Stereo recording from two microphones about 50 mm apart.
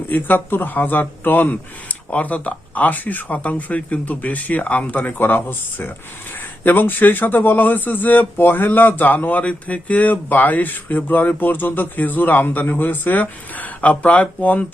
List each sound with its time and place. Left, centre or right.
0.1 s speech: left